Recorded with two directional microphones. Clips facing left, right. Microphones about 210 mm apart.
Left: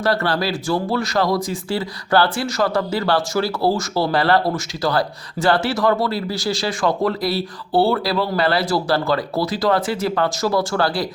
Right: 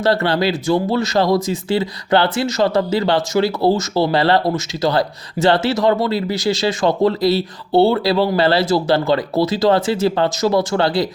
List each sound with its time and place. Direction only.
0.0 s speech: 25° right (ahead or behind)